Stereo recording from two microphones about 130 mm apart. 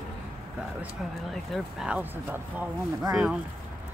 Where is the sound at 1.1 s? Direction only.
Centre (ahead or behind).